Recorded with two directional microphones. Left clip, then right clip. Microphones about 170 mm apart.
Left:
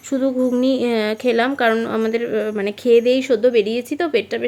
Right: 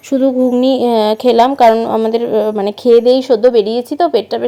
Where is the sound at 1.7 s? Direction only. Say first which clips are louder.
Right 8 dB; 20° left (ahead or behind).